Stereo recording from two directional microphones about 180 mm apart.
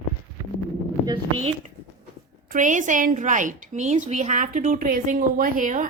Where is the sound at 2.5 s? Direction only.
45° right (ahead or behind).